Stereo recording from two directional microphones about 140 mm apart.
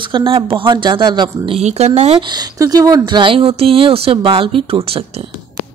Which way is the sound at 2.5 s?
25° right (ahead or behind).